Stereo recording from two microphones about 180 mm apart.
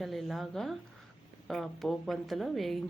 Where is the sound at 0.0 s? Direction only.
Centre (ahead or behind).